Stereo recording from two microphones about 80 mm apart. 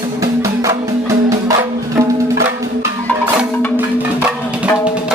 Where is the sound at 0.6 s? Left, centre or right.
Right.